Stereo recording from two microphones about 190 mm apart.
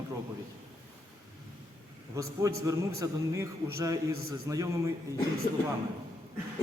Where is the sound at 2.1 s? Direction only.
15° right (ahead or behind).